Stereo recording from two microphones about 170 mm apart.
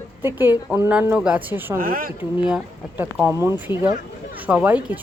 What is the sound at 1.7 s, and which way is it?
Speech, 55° right (ahead or behind).